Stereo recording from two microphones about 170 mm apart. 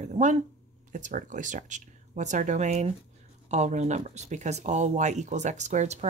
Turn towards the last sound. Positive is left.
turn(degrees=-40)  # may be behind; listen again after turning